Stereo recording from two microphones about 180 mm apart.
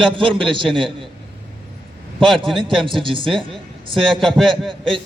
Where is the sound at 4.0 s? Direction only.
5° left (ahead or behind).